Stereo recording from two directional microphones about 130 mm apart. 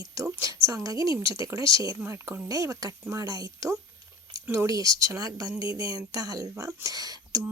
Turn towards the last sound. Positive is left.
turn(degrees=-30)  # may be behind; listen again after turning